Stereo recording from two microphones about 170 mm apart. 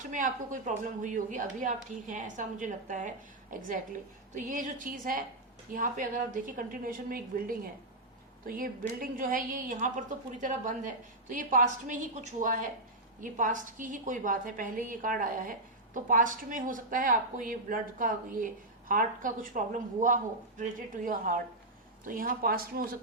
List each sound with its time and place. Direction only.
0.0 s a woman's voice: 50° right (ahead or behind)